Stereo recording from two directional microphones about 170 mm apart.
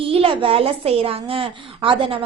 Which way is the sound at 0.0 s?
30° right (ahead or behind).